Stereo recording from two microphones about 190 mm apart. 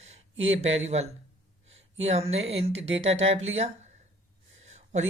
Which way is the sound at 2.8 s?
75° right (ahead or behind).